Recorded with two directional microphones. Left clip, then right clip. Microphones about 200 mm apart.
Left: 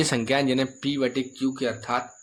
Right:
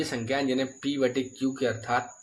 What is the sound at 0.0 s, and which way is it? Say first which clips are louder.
Speech: left 5 dB; 40° left (ahead or behind).